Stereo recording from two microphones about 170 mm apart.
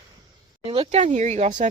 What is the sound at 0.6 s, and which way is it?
Speech, 35° right (ahead or behind).